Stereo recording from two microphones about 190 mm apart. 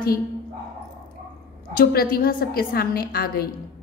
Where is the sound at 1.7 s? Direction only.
50° left (ahead or behind).